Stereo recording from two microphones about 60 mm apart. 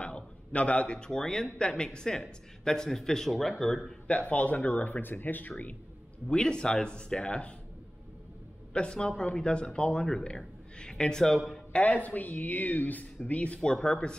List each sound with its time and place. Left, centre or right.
0.0 s speech: left; by 3.9 s centre
4.1 s speech: left
6.2 s speech: centre
8.7 s a man's voice: centre
11.7 s speech: left